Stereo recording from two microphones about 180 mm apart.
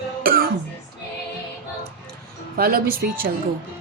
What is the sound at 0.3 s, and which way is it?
Music, 55° right (ahead or behind).